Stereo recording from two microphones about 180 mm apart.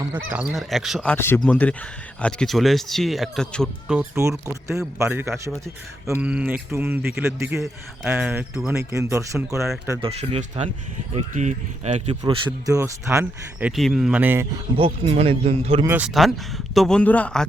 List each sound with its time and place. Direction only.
0.3 s speech: 5° right (ahead or behind)
1.1 s speech: 10° left (ahead or behind); by 4.2 s 5° right (ahead or behind)
4.2 s speech: 15° right (ahead or behind)
10.0 s speech: 35° right (ahead or behind)
12.2 s speech: 25° right (ahead or behind)
14.8 s speech: 30° right (ahead or behind)
15.8 s speech: 15° right (ahead or behind)
16.0 s speech: centre (ahead or behind)